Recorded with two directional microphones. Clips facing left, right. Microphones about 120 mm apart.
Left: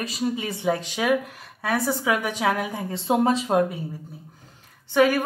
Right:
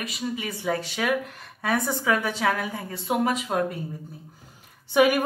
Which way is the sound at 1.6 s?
Centre (ahead or behind).